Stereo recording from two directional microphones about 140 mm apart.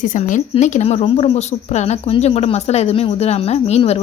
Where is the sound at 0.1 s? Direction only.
65° left (ahead or behind).